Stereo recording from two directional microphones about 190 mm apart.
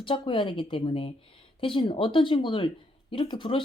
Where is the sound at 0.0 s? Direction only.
25° left (ahead or behind).